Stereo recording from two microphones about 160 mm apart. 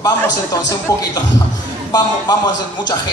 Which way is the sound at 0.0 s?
20° left (ahead or behind).